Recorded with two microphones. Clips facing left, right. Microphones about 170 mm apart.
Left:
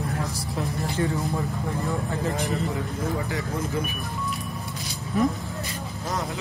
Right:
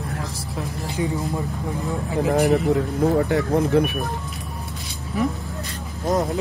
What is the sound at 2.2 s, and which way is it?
Speech, 65° right (ahead or behind).